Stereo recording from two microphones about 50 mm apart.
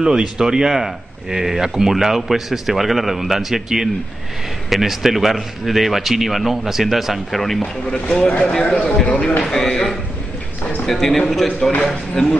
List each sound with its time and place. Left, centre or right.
0.0 s speech: centre
7.9 s speech: centre
11.8 s speech: centre